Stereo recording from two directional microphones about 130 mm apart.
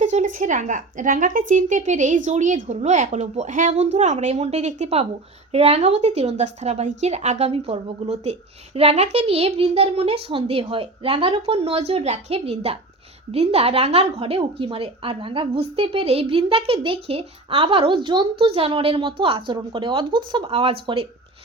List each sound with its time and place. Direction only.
0.0 s a woman's voice: 70° right (ahead or behind); by 21.1 s 45° right (ahead or behind)